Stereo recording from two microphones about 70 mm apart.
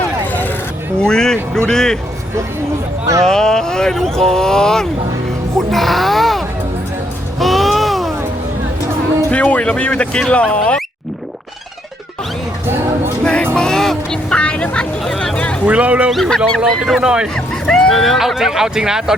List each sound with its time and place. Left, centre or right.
0.3 s vehicle: left
0.9 s speech: centre
3.2 s speech: centre
7.3 s a sound: centre
9.3 s speech: centre
13.2 s music: centre
15.0 s a sound: centre
15.6 s speech: centre
16.1 s speech: centre
16.8 s speech: centre
17.3 s speech: centre